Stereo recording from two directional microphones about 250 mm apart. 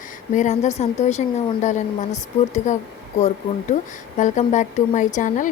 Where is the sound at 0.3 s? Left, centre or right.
Left.